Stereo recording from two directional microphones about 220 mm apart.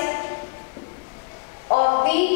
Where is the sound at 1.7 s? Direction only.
25° left (ahead or behind).